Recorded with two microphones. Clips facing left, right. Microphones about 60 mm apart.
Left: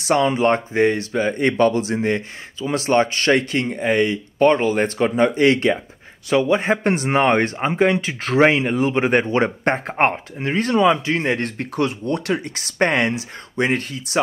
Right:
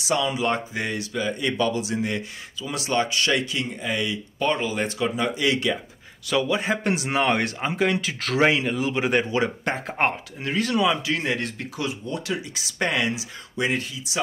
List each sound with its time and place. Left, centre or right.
0.0 s speech: left
6.3 s speech: left